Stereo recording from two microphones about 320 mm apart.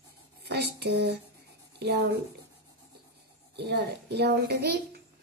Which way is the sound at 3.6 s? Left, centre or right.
Right.